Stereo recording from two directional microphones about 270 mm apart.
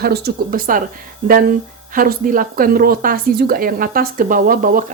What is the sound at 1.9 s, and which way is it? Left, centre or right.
Speech, right.